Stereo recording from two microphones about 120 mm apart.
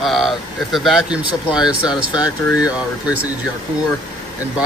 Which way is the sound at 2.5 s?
30° left (ahead or behind).